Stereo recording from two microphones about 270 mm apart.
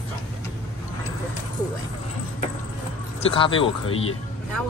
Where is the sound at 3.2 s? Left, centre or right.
Centre.